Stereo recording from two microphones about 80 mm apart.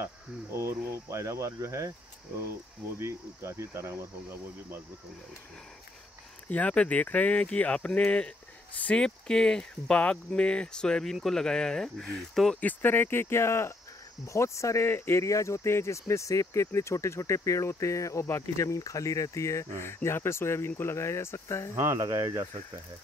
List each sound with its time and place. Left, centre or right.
0.0 s speech: right
6.5 s speech: centre
12.5 s speech: left
21.7 s speech: right